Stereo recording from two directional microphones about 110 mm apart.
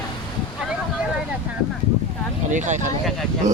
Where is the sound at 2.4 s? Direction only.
90° right.